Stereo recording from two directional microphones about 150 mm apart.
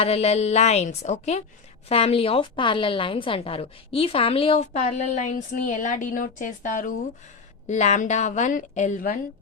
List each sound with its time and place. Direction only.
0.0 s a woman's voice: 45° left (ahead or behind); by 6.9 s 60° left (ahead or behind)
7.7 s a woman's voice: 50° left (ahead or behind)